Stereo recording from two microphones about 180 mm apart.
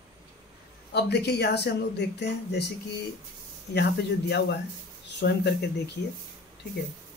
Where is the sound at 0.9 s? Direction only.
65° left (ahead or behind).